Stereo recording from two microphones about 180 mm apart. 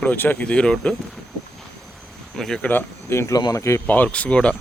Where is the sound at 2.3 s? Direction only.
5° left (ahead or behind).